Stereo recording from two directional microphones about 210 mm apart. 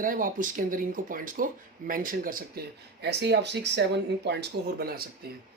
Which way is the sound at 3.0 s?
55° right (ahead or behind).